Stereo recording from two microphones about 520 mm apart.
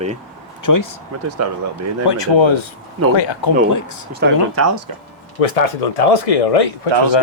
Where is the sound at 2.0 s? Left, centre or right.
Left.